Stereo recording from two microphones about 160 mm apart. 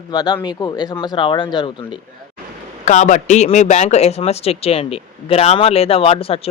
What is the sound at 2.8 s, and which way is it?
Speech, 50° left (ahead or behind).